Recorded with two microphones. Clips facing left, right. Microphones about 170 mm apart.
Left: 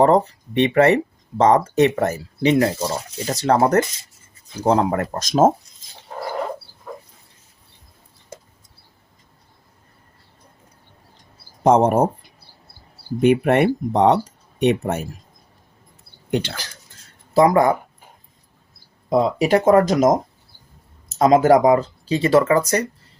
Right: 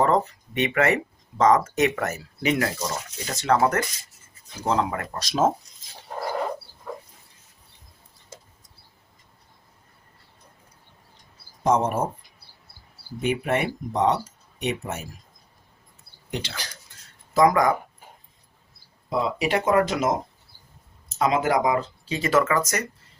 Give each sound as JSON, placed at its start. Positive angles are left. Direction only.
{"t": 0.0, "sound": "speech", "side_deg": 35}
{"t": 11.6, "sound": "speech", "side_deg": 60}
{"t": 13.2, "sound": "speech", "side_deg": 60}
{"t": 16.3, "sound": "speech", "side_deg": 55}
{"t": 17.3, "sound": "speech", "side_deg": 30}
{"t": 19.1, "sound": "speech", "side_deg": 40}